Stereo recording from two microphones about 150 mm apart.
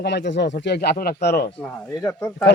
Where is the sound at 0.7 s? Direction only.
90° left.